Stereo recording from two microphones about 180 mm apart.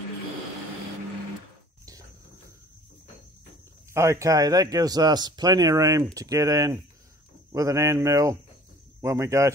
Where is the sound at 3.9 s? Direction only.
15° right (ahead or behind).